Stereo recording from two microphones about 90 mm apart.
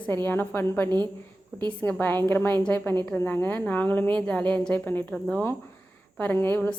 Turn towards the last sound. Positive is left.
turn(degrees=20)  # may be behind; listen again after turning